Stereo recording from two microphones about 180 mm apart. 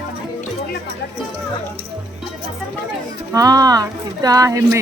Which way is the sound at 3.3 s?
20° right (ahead or behind).